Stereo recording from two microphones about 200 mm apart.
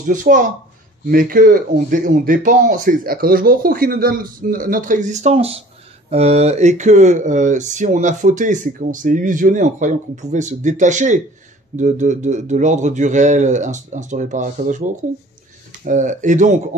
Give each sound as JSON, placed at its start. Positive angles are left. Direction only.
{"t": 0.0, "sound": "speech", "side_deg": -40}